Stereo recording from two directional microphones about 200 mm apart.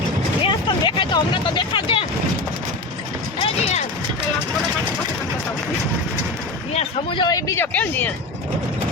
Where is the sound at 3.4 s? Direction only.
35° left (ahead or behind).